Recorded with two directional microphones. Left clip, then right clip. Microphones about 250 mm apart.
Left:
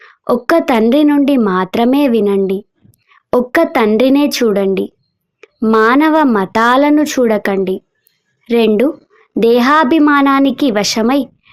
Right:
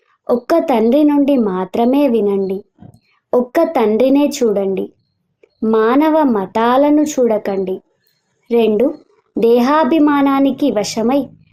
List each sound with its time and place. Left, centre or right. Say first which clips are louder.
0.3 s speech: left 2 dB; left